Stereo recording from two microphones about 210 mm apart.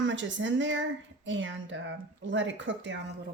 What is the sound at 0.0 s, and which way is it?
Speech, 60° right (ahead or behind).